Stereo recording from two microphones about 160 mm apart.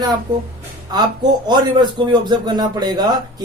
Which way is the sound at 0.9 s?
25° right (ahead or behind).